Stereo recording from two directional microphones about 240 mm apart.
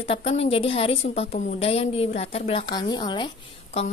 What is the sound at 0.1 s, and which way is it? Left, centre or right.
A woman's voice, left.